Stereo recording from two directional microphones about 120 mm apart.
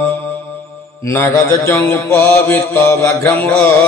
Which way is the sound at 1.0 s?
25° left (ahead or behind).